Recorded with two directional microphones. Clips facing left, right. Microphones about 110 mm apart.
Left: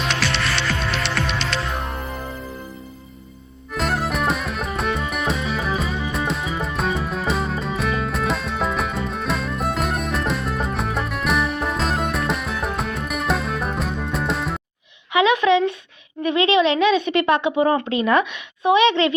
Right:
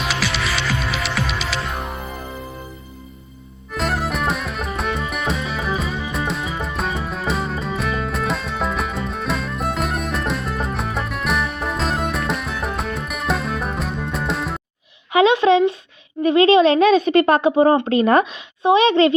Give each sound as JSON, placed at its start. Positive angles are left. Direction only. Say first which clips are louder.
{"t": 0.0, "sound": "music", "louder": "even", "side_deg": -5}
{"t": 3.7, "sound": "music", "louder": "even", "side_deg": 0}
{"t": 15.1, "sound": "a sound", "louder": "right 3 dB", "side_deg": -35}
{"t": 16.2, "sound": "a woman's voice", "louder": "right 5 dB", "side_deg": -35}